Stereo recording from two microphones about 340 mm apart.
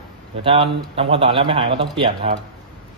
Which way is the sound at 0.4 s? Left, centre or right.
Centre.